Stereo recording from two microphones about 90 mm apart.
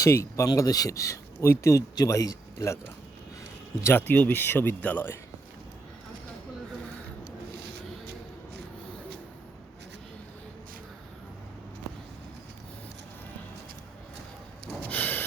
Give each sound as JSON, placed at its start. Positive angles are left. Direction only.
{"t": 0.0, "sound": "a man's voice", "side_deg": 30}
{"t": 3.8, "sound": "speech", "side_deg": 25}
{"t": 14.8, "sound": "snort", "side_deg": 20}